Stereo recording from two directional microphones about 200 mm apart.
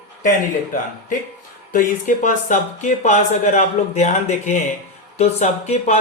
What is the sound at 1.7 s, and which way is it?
Speech, 40° left (ahead or behind).